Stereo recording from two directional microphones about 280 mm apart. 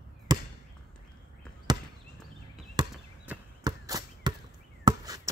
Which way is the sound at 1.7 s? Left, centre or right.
Centre.